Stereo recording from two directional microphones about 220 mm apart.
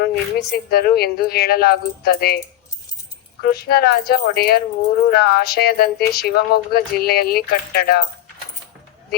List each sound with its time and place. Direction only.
0.0 s a woman's voice: 45° left (ahead or behind)
3.4 s a woman's voice: 45° left (ahead or behind)